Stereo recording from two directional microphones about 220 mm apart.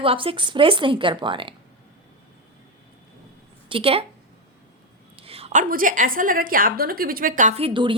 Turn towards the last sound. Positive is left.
turn(degrees=-25)  # may be behind; listen again after turning